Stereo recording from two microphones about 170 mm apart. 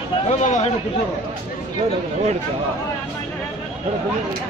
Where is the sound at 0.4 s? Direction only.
45° left (ahead or behind).